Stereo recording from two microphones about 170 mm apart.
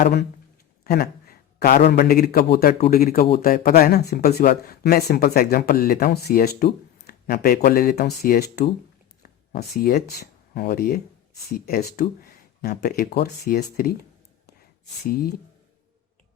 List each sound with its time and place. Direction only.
0.9 s a sound: 65° left (ahead or behind)
1.9 s speech: 65° left (ahead or behind)
15.1 s speech: 65° left (ahead or behind)